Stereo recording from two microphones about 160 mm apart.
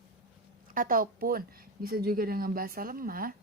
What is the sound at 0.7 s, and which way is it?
Speech, 60° right (ahead or behind).